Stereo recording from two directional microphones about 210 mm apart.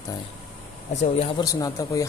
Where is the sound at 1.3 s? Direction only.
15° left (ahead or behind).